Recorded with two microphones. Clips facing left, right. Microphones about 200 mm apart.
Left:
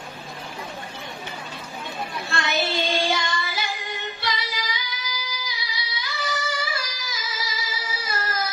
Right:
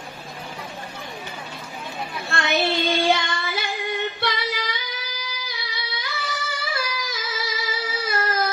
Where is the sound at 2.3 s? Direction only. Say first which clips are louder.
Right 3 dB; 60° right (ahead or behind).